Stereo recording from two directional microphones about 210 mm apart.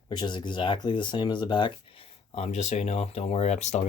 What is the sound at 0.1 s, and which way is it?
Speech, 20° left (ahead or behind).